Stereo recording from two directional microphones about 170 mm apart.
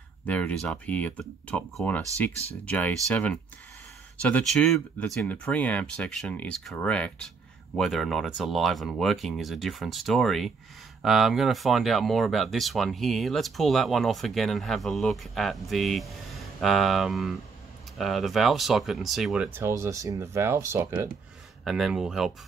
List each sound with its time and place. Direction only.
0.3 s speech: 5° left (ahead or behind); by 21.1 s 15° right (ahead or behind)
21.6 s speech: centre (ahead or behind)